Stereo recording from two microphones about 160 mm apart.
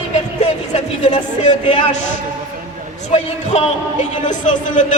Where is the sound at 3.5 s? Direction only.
40° left (ahead or behind).